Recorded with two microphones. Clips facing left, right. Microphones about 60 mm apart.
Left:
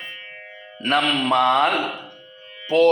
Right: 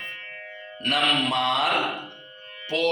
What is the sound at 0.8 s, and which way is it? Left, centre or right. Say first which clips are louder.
Speech: left 3 dB; left.